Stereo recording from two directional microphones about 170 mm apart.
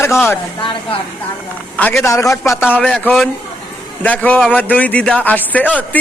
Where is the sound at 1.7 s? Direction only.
10° left (ahead or behind).